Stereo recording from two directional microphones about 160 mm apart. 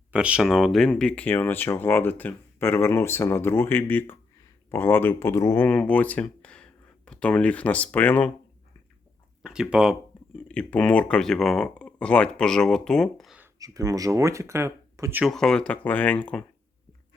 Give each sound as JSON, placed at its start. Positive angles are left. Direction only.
{"t": 0.1, "sound": "speech", "side_deg": -5}
{"t": 9.4, "sound": "speech", "side_deg": -5}
{"t": 10.5, "sound": "speech", "side_deg": 10}
{"t": 13.4, "sound": "speech", "side_deg": -20}
{"t": 15.2, "sound": "speech", "side_deg": 5}